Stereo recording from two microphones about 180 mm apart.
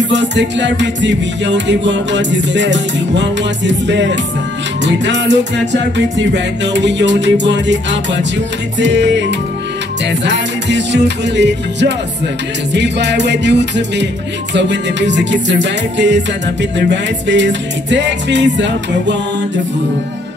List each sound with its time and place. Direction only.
0.1 s music: 80° right